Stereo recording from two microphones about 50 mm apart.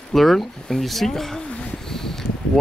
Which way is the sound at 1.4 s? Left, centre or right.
Left.